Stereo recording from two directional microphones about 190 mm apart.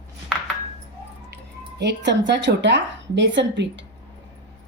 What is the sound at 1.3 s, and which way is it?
Speech, 65° right (ahead or behind).